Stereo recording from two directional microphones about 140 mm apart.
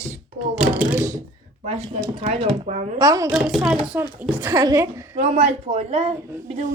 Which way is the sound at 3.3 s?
Centre (ahead or behind).